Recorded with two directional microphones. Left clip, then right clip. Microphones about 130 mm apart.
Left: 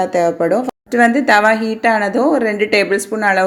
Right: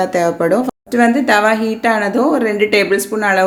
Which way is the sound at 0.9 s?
50° left (ahead or behind).